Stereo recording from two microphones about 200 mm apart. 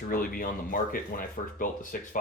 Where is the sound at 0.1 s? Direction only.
45° left (ahead or behind).